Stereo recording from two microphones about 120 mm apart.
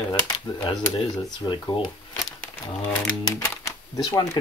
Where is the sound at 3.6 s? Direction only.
30° left (ahead or behind).